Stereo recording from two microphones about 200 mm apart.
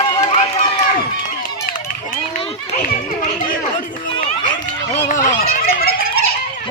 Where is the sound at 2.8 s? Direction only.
45° left (ahead or behind).